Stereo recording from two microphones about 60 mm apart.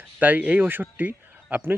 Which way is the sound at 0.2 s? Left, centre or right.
Right.